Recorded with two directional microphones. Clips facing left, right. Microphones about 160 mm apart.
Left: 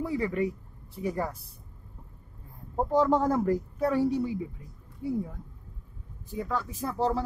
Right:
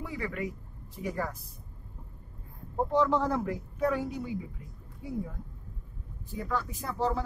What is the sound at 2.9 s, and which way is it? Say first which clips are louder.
Speech: left 3 dB; 45° left (ahead or behind).